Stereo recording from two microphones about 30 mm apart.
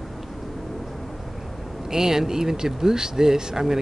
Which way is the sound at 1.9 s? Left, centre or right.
Centre.